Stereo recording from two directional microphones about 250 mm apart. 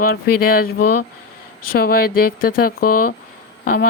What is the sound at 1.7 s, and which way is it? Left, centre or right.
Speech, left.